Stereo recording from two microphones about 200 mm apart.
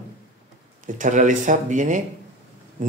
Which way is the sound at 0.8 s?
40° right (ahead or behind).